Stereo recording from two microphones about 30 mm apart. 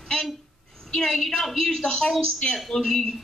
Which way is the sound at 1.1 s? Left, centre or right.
Centre.